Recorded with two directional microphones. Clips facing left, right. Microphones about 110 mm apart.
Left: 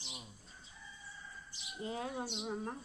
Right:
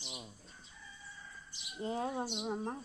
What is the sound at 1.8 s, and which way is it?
Speech, 35° right (ahead or behind).